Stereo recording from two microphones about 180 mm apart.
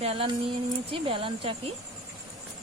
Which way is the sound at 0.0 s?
35° right (ahead or behind).